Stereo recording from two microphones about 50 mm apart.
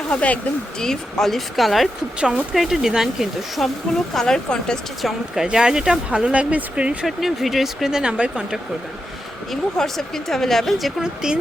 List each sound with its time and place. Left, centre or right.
0.1 s speech: left
0.8 s speech: centre
2.2 s speech: centre
2.6 s speech: centre
3.6 s speech: centre
5.0 s speech: centre; by 6.9 s right
7.0 s speech: centre
9.5 s speech: centre
11.0 s speech: centre